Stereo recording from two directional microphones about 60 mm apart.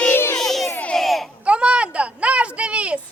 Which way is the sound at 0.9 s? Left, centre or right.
Centre.